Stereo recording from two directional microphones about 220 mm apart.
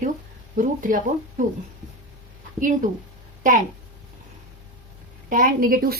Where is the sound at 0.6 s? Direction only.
35° right (ahead or behind).